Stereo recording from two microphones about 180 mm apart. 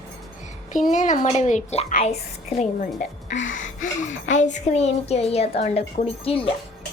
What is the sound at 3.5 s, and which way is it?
A woman's voice, 45° left (ahead or behind).